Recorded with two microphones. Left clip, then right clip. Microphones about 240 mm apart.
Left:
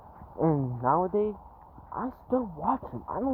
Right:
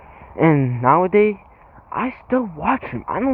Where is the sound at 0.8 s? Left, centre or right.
Right.